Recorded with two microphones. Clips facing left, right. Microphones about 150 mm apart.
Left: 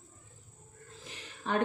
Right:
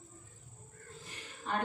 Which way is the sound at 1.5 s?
90° left.